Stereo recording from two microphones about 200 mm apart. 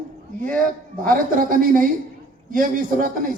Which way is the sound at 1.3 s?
45° right (ahead or behind).